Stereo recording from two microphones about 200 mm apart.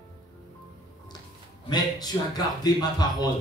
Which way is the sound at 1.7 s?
20° left (ahead or behind).